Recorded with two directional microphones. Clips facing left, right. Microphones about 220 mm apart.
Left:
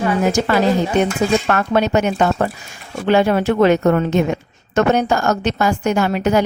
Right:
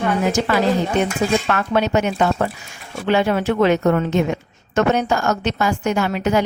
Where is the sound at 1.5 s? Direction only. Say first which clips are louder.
Left 2 dB; 45° left (ahead or behind).